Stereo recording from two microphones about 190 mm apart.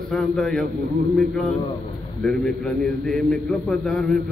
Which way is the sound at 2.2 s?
5° left (ahead or behind).